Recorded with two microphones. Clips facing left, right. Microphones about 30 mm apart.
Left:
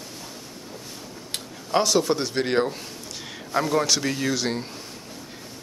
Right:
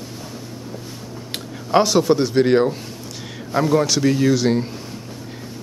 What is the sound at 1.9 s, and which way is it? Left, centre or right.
Speech, centre.